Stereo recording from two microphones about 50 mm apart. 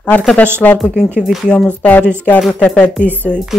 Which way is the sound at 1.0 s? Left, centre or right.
Centre.